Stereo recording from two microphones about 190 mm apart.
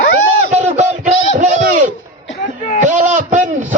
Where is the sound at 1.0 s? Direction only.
40° right (ahead or behind).